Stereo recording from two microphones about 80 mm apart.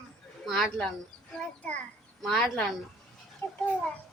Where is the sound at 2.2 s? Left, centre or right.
Centre.